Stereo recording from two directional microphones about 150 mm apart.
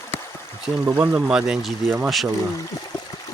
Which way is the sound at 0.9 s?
10° right (ahead or behind).